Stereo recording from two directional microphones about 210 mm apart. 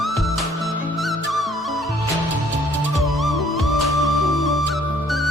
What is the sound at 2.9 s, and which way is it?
Music, centre (ahead or behind).